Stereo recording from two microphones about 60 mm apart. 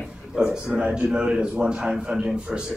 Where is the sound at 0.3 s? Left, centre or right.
Centre.